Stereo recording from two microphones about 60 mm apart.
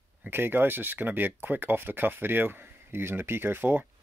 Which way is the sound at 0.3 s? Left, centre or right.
Right.